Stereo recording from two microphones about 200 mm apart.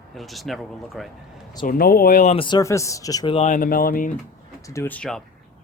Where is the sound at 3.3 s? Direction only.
40° left (ahead or behind).